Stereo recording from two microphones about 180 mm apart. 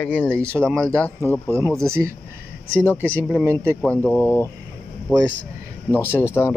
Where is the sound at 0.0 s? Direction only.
5° left (ahead or behind).